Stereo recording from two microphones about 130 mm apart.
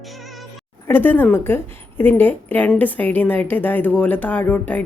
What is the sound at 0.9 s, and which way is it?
A woman's voice, 15° left (ahead or behind).